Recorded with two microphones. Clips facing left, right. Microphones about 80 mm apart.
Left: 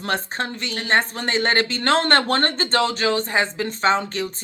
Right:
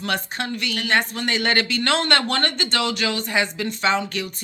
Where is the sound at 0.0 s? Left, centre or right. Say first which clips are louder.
Left 1 dB; left.